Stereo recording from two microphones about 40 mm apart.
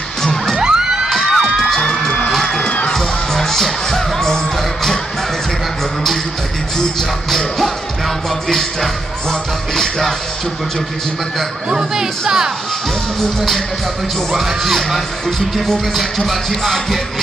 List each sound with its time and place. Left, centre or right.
0.6 s music: centre
1.2 s cheering: centre
1.7 s music: centre
2.6 s music: left
2.9 s music: centre
6.8 s music: centre
11.7 s speech: centre
14.3 s speech: centre